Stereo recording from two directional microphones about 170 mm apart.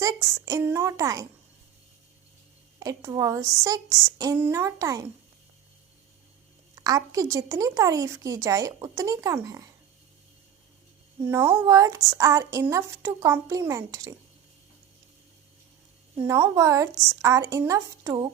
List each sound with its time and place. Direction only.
0.0 s speech: 20° right (ahead or behind)
2.7 s a woman's voice: 20° right (ahead or behind)
6.7 s a woman's voice: 20° right (ahead or behind)
11.2 s a woman's voice: 15° right (ahead or behind)
16.1 s a woman's voice: 15° right (ahead or behind)